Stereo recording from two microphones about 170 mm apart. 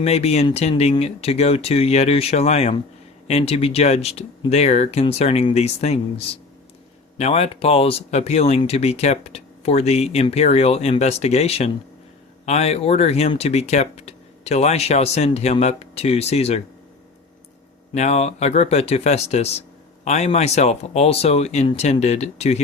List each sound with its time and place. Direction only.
0.0 s speech: 35° left (ahead or behind)
17.9 s speech: 40° left (ahead or behind)